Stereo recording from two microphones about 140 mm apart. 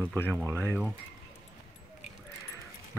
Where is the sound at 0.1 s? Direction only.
10° left (ahead or behind).